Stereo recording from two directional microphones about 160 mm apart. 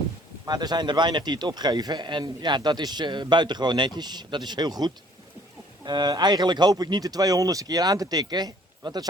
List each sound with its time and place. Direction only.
0.4 s a man's voice: 25° right (ahead or behind)